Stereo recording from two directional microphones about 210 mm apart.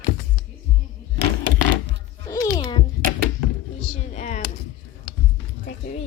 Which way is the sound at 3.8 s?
30° left (ahead or behind).